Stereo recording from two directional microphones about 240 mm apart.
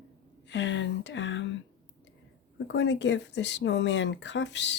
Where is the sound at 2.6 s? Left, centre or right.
Left.